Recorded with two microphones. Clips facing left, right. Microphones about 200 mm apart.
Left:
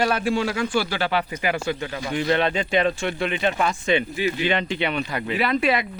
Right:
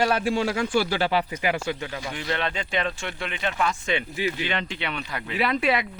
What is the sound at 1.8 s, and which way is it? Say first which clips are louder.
Speech: left 6 dB; 5° right (ahead or behind).